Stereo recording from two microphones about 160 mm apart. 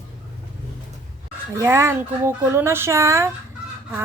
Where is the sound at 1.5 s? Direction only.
15° right (ahead or behind).